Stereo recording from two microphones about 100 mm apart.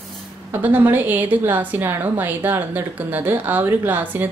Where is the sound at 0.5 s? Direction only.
20° right (ahead or behind).